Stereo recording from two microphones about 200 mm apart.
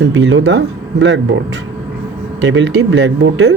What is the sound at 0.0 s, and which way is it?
Speech, 65° right (ahead or behind).